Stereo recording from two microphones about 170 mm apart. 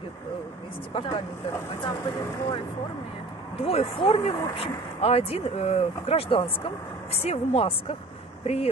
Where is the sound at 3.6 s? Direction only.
35° left (ahead or behind).